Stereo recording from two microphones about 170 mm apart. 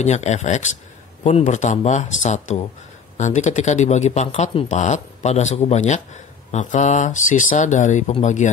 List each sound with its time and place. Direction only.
0.0 s speech: 40° left (ahead or behind)